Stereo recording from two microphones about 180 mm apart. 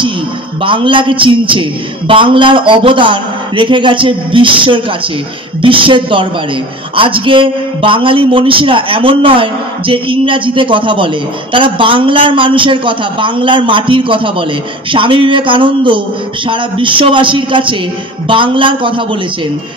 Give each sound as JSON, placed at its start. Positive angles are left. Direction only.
{"t": 0.6, "sound": "speech", "side_deg": -30}